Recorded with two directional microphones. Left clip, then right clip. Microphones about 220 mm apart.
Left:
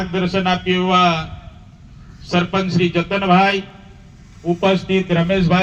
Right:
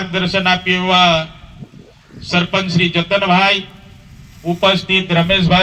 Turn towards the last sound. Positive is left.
turn(degrees=-25)  # may be behind; listen again after turning